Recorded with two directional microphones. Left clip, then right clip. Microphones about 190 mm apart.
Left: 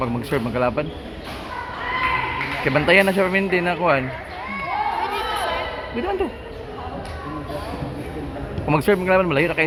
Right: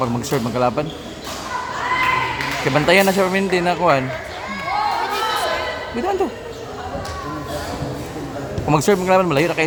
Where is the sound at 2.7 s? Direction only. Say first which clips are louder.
Right 1 dB; 20° right (ahead or behind).